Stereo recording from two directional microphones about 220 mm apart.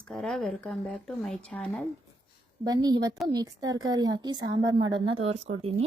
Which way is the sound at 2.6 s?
20° right (ahead or behind).